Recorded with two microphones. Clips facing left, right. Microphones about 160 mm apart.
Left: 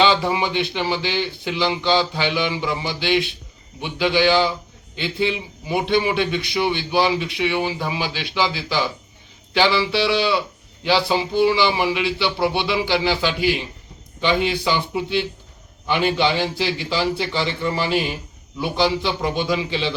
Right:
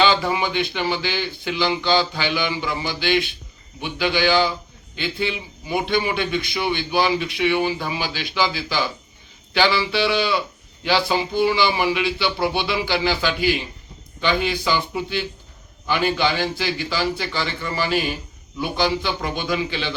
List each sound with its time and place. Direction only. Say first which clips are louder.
0.0 s a man's voice: left 1 dB; 25° left (ahead or behind)